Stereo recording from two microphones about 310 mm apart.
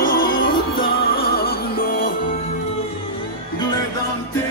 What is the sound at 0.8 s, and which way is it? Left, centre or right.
Music, left.